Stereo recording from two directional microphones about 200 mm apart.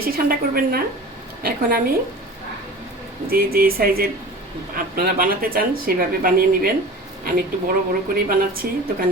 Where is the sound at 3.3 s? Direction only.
45° right (ahead or behind).